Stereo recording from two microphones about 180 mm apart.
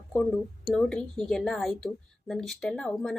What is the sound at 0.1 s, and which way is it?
A woman's voice, 5° left (ahead or behind).